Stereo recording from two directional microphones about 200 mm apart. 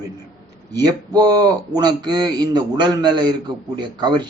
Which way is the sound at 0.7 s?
20° right (ahead or behind).